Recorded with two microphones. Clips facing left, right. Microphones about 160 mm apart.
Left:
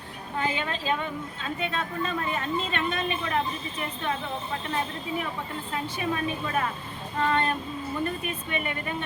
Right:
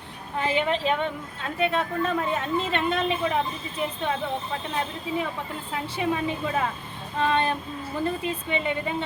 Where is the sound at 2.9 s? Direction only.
90° right.